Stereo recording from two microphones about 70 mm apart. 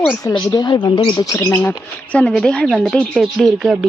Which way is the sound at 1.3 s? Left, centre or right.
Left.